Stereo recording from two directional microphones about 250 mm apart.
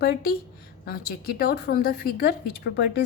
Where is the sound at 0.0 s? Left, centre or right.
Left.